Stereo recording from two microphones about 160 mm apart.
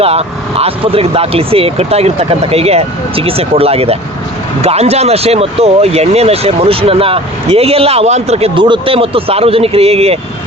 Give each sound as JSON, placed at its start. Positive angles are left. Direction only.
{"t": 0.0, "sound": "speech", "side_deg": -40}